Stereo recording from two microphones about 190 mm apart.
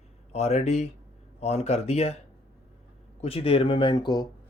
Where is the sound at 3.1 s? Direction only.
30° left (ahead or behind).